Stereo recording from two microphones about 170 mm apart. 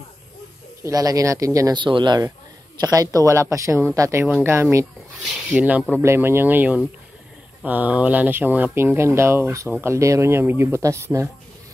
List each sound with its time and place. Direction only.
0.8 s speech: 20° right (ahead or behind)